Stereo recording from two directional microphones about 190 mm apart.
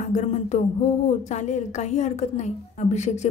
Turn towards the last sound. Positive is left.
turn(degrees=35)  # may be behind; listen again after turning